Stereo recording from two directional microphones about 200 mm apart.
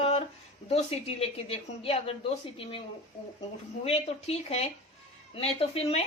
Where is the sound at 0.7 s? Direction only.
30° left (ahead or behind).